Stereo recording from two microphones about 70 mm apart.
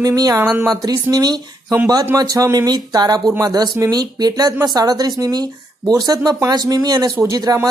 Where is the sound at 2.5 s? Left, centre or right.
Right.